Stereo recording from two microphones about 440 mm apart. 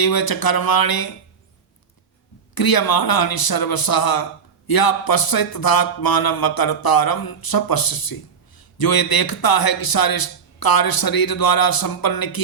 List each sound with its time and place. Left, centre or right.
0.0 s a man's voice: left
2.6 s a man's voice: left